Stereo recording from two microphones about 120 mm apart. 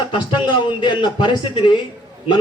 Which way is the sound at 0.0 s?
40° left (ahead or behind).